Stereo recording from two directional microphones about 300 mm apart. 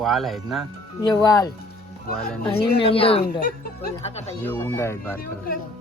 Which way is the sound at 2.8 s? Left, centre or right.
Centre.